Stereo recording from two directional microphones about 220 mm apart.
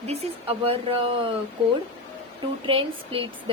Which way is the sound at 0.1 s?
25° right (ahead or behind).